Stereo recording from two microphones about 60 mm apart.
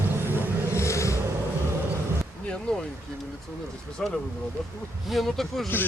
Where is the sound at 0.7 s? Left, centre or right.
Left.